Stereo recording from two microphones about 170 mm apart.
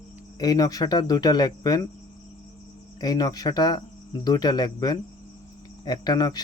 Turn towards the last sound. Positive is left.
turn(degrees=25)  # may be behind; listen again after turning